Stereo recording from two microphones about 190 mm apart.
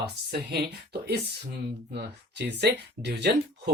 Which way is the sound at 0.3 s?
60° right (ahead or behind).